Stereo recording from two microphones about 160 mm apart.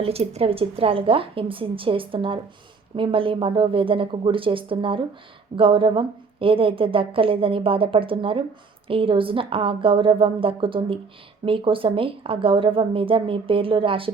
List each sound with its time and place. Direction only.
0.0 s a woman's voice: 40° right (ahead or behind)